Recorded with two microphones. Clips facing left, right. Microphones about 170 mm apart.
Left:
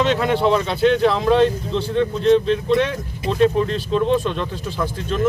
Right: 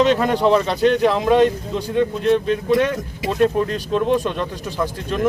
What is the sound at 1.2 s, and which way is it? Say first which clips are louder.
Speech: right 1 dB; 10° right (ahead or behind).